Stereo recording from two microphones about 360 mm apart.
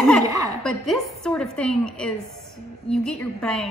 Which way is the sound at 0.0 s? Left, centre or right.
Centre.